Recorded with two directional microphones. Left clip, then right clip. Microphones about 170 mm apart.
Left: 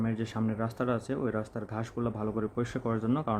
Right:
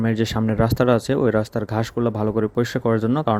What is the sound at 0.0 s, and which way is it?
Speech, 40° right (ahead or behind).